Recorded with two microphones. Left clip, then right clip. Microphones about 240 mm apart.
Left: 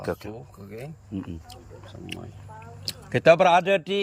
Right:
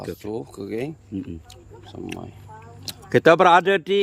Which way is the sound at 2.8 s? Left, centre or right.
Centre.